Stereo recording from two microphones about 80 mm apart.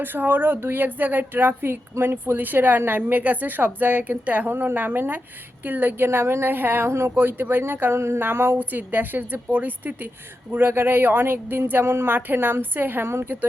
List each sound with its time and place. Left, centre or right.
0.0 s a woman's voice: right